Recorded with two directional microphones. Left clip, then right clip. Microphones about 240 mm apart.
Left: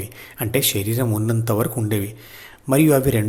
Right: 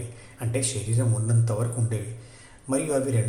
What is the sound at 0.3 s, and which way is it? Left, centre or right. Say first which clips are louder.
A man's voice: left 9 dB; left.